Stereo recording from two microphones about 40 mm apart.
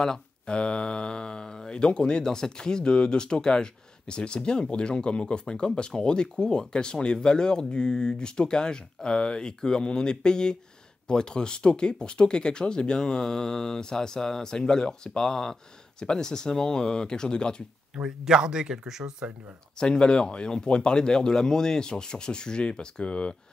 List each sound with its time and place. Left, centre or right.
0.0 s speech: centre
18.0 s speech: centre
19.8 s speech: left